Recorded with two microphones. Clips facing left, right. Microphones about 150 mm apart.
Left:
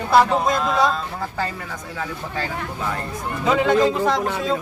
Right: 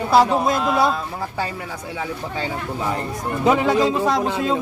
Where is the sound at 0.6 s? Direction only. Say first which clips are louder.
Right 1 dB; 10° right (ahead or behind).